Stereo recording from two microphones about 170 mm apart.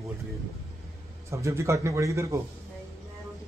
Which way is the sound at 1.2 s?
15° right (ahead or behind).